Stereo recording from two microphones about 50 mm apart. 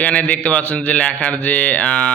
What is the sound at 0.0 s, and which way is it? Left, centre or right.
A man's voice, left.